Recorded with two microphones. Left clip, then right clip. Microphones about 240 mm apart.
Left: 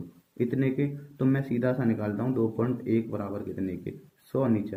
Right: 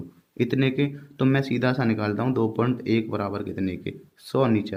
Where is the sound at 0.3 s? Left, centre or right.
Right.